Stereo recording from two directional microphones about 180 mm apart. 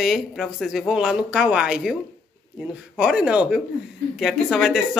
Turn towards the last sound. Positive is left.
turn(degrees=0)  # may be behind; listen again after turning